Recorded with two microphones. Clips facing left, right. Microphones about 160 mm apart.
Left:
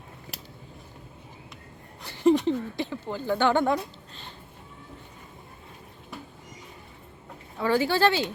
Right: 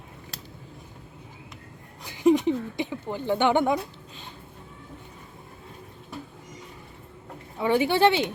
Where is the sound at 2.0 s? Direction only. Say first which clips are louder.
Right 1 dB; 15° right (ahead or behind).